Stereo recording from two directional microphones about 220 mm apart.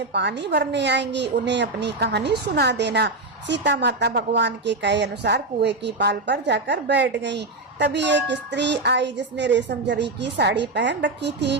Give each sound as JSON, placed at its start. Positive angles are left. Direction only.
{"t": 0.1, "sound": "a woman's voice", "side_deg": -50}